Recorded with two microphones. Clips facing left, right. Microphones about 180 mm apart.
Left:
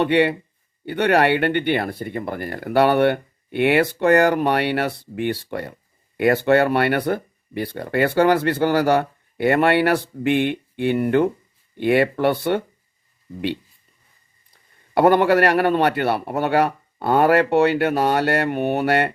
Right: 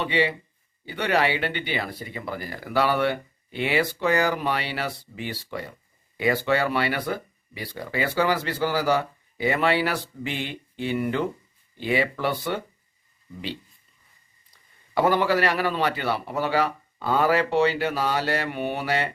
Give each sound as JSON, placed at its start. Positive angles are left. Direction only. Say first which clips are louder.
{"t": 0.0, "sound": "speech", "louder": "left 7 dB", "side_deg": 60}
{"t": 14.9, "sound": "speech", "louder": "left 6 dB", "side_deg": 60}